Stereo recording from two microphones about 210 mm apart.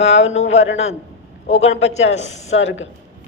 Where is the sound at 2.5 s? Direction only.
65° left (ahead or behind).